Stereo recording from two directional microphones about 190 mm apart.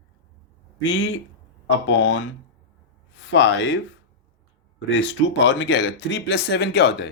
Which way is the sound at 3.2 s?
80° left.